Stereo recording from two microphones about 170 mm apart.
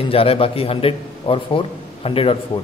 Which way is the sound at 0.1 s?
35° left (ahead or behind).